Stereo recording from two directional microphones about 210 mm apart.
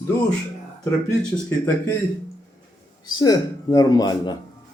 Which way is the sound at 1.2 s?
10° left (ahead or behind).